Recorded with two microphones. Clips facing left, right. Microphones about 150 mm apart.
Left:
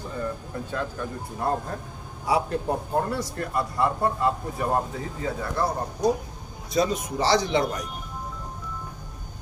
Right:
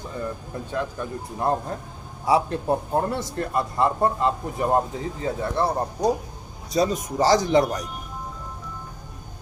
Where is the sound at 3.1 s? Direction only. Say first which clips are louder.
Right 2 dB; 25° right (ahead or behind).